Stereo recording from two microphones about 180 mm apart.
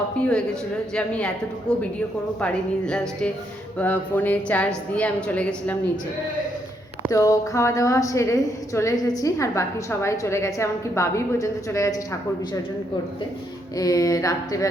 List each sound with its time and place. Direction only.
0.2 s a woman's voice: 5° left (ahead or behind)
7.1 s a woman's voice: 20° left (ahead or behind)
13.7 s speech: 20° left (ahead or behind)